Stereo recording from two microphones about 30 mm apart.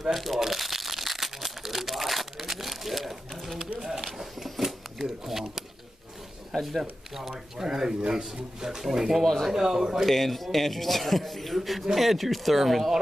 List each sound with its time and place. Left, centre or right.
0.1 s speech: centre
0.4 s crumpling: centre
3.1 s a sound: centre
4.0 s cash register: centre
6.8 s speech: centre
10.0 s speech: centre